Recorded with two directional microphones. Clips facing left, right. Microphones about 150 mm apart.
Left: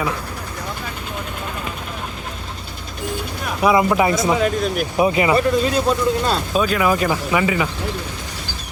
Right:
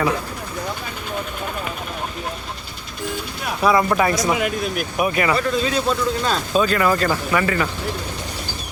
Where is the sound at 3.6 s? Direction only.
15° left (ahead or behind).